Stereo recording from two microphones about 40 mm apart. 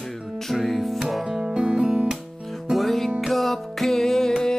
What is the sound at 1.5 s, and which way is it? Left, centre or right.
Guitar, right.